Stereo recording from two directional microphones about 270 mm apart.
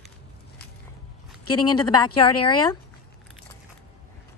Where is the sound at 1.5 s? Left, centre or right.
Left.